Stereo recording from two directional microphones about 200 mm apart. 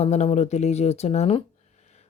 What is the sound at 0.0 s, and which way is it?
Speech, 30° left (ahead or behind).